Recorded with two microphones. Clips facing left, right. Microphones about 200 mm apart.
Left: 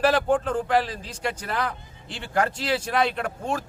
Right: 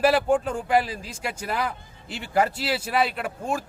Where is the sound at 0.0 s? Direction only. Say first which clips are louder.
Right 1 dB; 10° right (ahead or behind).